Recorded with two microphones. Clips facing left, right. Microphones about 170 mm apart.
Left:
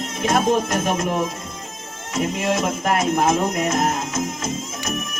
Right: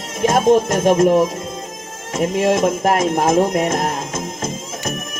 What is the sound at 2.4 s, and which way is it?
Music, 50° right (ahead or behind).